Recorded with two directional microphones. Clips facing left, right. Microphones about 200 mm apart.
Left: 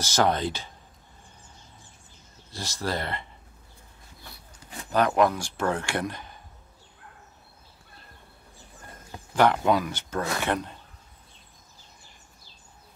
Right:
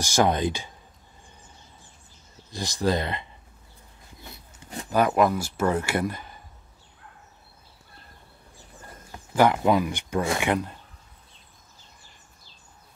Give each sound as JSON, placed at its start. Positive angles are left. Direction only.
{"t": 0.0, "sound": "speech", "side_deg": -15}
{"t": 2.5, "sound": "speech", "side_deg": -15}
{"t": 4.2, "sound": "a sound", "side_deg": -20}
{"t": 4.9, "sound": "speech", "side_deg": -5}
{"t": 9.3, "sound": "speech", "side_deg": -10}